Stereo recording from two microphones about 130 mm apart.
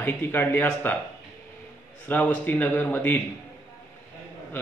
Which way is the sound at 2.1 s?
15° left (ahead or behind).